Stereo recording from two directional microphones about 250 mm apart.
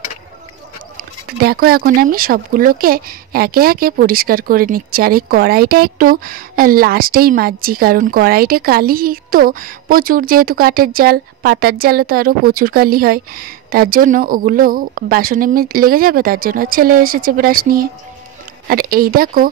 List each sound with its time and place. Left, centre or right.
0.9 s speech: right